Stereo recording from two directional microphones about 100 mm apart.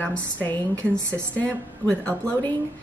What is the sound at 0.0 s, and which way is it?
Speech, 20° left (ahead or behind).